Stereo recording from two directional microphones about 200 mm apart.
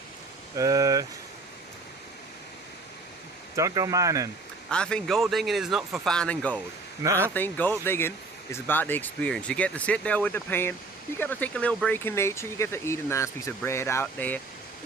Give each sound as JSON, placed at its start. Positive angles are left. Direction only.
{"t": 0.5, "sound": "speech", "side_deg": -15}
{"t": 3.5, "sound": "speech", "side_deg": -15}
{"t": 4.7, "sound": "speech", "side_deg": 5}